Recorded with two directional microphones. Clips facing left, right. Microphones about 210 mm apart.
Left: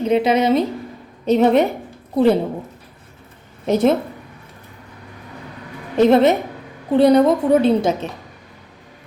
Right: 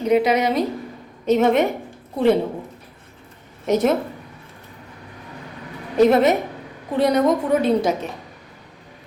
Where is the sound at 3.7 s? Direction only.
30° left (ahead or behind).